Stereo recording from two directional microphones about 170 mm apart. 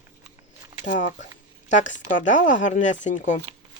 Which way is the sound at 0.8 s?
45° left (ahead or behind).